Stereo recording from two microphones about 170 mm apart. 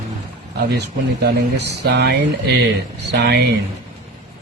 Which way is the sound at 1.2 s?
80° right.